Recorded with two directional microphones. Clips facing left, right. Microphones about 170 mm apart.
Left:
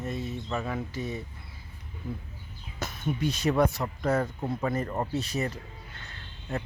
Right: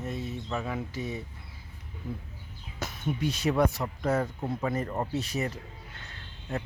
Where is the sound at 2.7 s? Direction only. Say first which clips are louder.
Left 1 dB; 5° right (ahead or behind).